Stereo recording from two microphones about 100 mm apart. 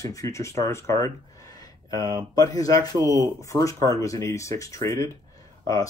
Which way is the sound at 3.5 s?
35° left (ahead or behind).